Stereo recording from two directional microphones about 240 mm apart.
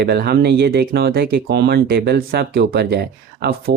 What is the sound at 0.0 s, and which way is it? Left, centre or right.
Speech, right.